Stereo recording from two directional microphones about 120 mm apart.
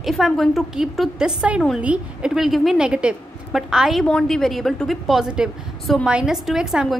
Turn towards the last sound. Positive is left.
turn(degrees=-5)  # may be behind; listen again after turning